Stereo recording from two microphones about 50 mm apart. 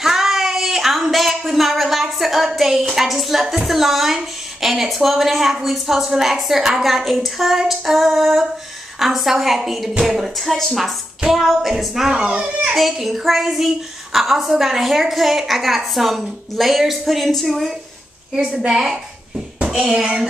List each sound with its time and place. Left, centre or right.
0.0 s a sound: centre
2.8 s a woman's voice: centre
12.3 s a child's voice: right
12.9 s a woman's voice: centre
18.7 s a woman's voice: centre